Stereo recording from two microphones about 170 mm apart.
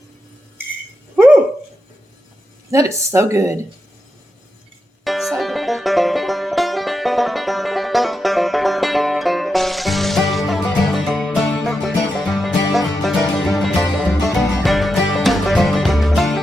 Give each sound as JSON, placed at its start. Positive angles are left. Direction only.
{"t": 2.6, "sound": "speech", "side_deg": -15}
{"t": 5.0, "sound": "music", "side_deg": 0}